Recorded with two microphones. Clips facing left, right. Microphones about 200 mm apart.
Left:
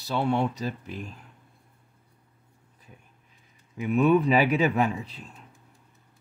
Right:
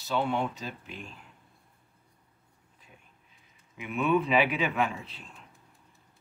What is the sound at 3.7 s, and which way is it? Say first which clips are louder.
Speech: left 6 dB; 40° left (ahead or behind).